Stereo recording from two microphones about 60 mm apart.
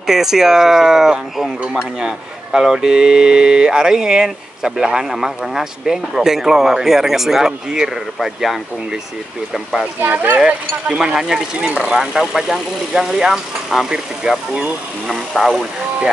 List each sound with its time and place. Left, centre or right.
0.0 s speech: centre
10.0 s speech: right
10.4 s speech: centre
15.0 s speech: centre